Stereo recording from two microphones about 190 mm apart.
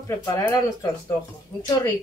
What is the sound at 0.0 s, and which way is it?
Speech, 15° left (ahead or behind).